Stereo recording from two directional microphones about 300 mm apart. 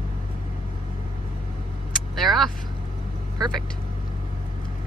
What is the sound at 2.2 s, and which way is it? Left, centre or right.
Vehicle, centre.